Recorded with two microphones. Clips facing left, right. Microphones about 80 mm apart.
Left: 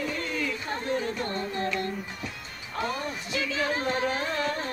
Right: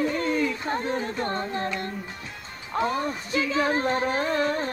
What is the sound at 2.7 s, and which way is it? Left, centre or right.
Speech, right.